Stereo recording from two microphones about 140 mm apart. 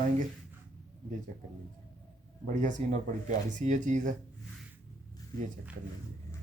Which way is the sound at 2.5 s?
65° right (ahead or behind).